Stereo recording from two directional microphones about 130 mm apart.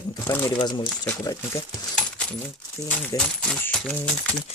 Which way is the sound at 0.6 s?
35° left (ahead or behind).